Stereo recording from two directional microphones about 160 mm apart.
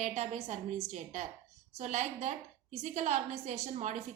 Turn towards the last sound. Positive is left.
turn(degrees=-45)  # may be behind; listen again after turning